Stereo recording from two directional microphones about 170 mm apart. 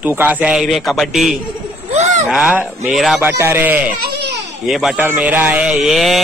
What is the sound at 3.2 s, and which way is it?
A man's voice, 15° right (ahead or behind).